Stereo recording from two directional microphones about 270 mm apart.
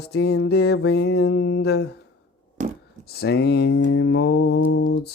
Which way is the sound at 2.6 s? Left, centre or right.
Right.